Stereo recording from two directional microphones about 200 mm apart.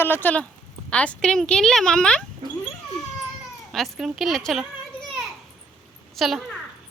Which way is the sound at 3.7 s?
Centre (ahead or behind).